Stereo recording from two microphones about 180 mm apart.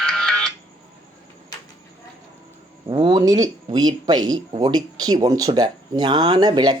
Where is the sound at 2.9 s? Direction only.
30° right (ahead or behind).